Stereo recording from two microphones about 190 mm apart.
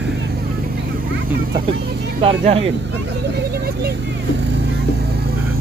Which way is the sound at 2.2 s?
30° right (ahead or behind).